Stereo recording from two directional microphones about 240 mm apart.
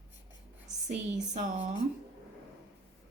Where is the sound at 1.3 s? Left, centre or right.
Right.